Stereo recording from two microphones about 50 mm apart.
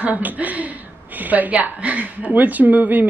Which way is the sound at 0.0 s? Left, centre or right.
Right.